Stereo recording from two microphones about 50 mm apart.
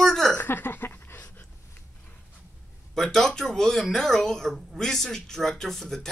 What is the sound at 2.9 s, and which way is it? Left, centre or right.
Speech, centre.